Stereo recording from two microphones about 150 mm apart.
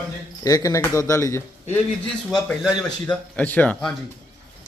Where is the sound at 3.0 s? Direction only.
10° left (ahead or behind).